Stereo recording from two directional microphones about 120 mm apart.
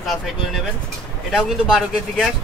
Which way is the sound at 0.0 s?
Centre (ahead or behind).